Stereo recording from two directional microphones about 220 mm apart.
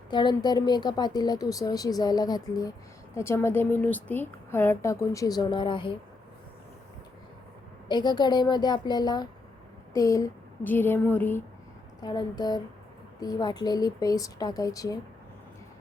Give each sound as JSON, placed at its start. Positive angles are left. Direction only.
{"t": 0.1, "sound": "a woman's voice", "side_deg": 20}
{"t": 7.9, "sound": "a woman's voice", "side_deg": 20}